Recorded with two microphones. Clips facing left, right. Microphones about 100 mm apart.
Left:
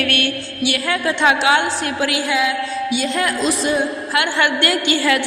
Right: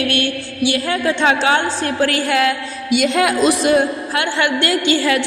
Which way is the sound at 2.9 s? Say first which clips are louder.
Right 8 dB; 80° right.